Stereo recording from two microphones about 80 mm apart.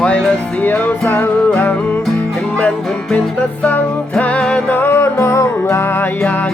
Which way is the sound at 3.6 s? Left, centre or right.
Centre.